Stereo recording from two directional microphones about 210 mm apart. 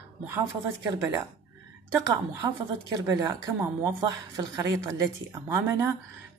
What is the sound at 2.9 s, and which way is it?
A woman's voice, 15° right (ahead or behind).